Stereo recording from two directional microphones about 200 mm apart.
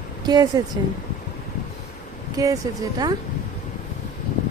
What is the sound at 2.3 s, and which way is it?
Speech, 15° right (ahead or behind).